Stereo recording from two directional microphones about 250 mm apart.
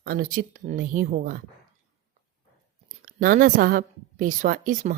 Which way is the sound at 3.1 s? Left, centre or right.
Right.